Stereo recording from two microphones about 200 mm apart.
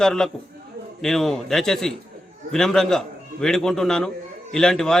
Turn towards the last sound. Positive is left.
turn(degrees=5)  # may be behind; listen again after turning